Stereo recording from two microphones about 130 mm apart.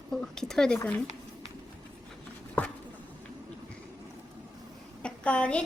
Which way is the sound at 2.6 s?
15° left (ahead or behind).